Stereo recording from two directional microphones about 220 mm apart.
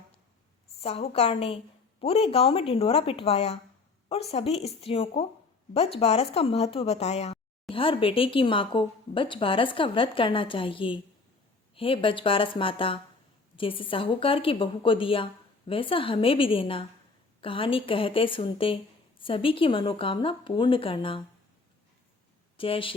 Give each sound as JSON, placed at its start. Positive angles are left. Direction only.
{"t": 0.8, "sound": "a woman's voice", "side_deg": 30}
{"t": 22.5, "sound": "a woman's voice", "side_deg": 25}